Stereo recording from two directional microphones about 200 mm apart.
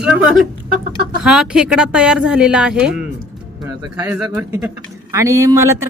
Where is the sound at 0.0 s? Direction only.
Centre (ahead or behind).